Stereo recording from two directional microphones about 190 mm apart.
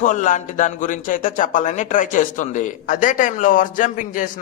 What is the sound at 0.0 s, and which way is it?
A man's voice, 45° left (ahead or behind).